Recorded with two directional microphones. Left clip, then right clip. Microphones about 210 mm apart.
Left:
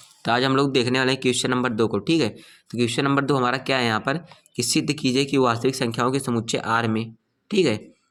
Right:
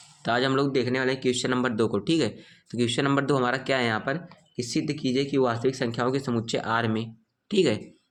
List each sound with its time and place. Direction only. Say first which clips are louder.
0.2 s speech: left 4 dB; 25° left (ahead or behind)